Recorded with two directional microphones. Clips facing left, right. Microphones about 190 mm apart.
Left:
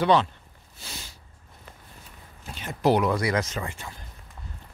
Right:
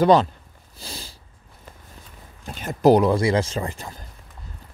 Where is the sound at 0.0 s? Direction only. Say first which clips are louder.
Right 5 dB; 40° right (ahead or behind).